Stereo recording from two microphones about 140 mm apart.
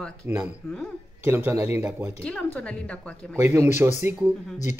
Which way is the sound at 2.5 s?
10° left (ahead or behind).